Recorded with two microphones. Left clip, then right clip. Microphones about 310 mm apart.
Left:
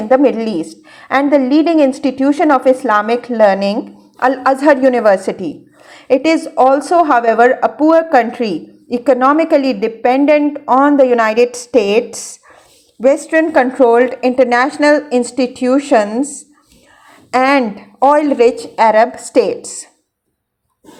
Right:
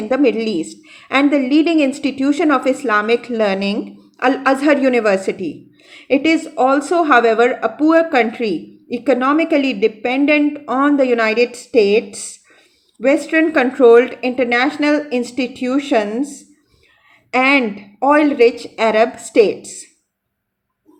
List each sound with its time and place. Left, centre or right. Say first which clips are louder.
0.1 s a woman's voice: left 4 dB; centre
13.3 s a woman's voice: left 3 dB; centre